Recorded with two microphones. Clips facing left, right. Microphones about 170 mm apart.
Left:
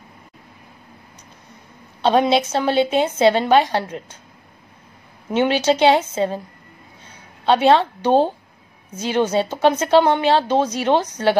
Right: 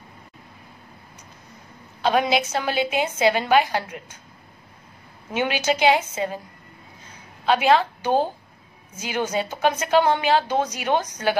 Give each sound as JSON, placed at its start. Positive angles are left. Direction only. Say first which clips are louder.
{"t": 2.0, "sound": "a woman's voice", "louder": "left 4 dB", "side_deg": 30}
{"t": 5.4, "sound": "a woman's voice", "louder": "left 5 dB", "side_deg": 30}
{"t": 7.4, "sound": "a woman's voice", "louder": "left 4 dB", "side_deg": 30}